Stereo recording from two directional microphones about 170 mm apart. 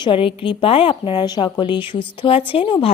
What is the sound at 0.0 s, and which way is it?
A woman's voice, 30° left (ahead or behind).